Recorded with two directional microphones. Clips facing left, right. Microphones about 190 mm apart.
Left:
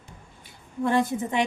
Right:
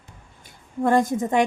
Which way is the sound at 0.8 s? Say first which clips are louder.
Right 4 dB; 45° right (ahead or behind).